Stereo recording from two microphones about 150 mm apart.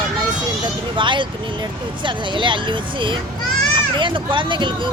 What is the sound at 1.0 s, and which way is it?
Speech, 30° right (ahead or behind).